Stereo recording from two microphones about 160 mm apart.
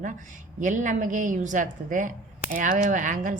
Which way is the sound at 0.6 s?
55° right (ahead or behind).